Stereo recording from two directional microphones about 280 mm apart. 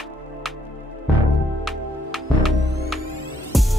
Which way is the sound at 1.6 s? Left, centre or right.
Centre.